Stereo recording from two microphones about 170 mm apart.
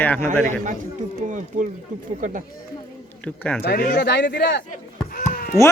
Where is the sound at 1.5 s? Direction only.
45° right (ahead or behind).